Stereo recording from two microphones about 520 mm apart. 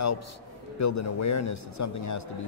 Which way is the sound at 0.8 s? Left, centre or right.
Left.